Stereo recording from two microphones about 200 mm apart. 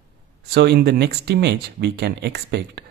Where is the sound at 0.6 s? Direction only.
55° right (ahead or behind).